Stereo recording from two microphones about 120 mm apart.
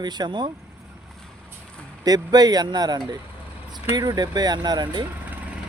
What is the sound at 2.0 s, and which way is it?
Speech, 30° right (ahead or behind).